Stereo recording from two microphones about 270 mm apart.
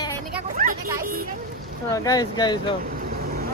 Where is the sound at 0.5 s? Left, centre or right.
Right.